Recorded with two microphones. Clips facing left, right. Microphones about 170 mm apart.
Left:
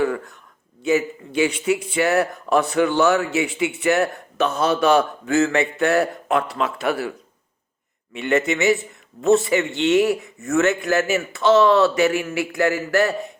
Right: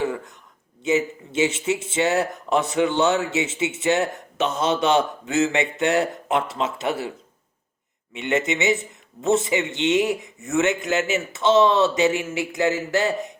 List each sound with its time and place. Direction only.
0.0 s a sound: 20° right (ahead or behind)
0.8 s a man's voice: 20° right (ahead or behind)
8.1 s a man's voice: 20° right (ahead or behind)